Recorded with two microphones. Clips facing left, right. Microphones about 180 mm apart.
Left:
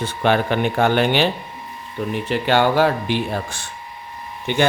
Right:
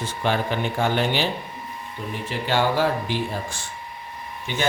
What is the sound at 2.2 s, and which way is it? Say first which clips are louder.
A man's voice: left 5 dB; 65° left (ahead or behind).